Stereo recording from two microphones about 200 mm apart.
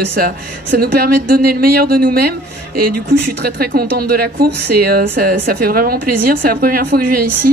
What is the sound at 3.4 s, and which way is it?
Speech, 50° right (ahead or behind).